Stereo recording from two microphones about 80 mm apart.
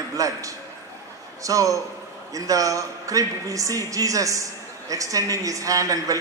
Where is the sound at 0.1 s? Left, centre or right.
Right.